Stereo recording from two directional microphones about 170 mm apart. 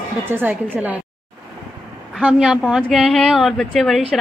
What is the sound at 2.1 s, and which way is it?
A woman's voice, 5° right (ahead or behind).